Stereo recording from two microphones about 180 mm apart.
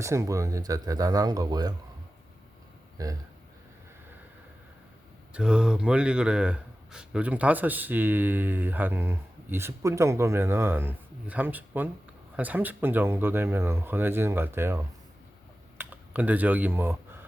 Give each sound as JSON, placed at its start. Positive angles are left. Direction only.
{"t": 0.0, "sound": "speech", "side_deg": -15}
{"t": 3.0, "sound": "speech", "side_deg": -20}
{"t": 5.3, "sound": "speech", "side_deg": -5}